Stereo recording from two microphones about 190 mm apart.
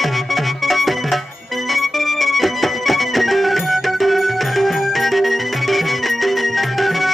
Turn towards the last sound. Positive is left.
turn(degrees=0)  # may be behind; listen again after turning